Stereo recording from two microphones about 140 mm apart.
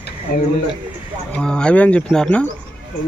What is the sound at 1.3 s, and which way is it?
Speech, 5° left (ahead or behind).